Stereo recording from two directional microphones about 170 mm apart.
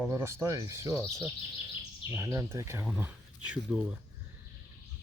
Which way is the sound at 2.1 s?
15° right (ahead or behind).